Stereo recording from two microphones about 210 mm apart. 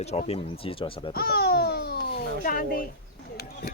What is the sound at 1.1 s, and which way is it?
A child's voice, 50° left (ahead or behind).